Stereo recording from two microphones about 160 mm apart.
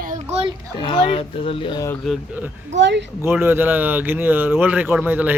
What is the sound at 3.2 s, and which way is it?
Speech, 15° right (ahead or behind).